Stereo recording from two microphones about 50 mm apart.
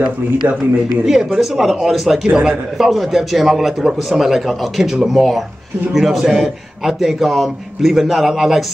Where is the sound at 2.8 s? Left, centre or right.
Centre.